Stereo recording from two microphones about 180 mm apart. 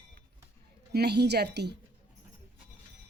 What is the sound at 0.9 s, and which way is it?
Speech, 65° right (ahead or behind).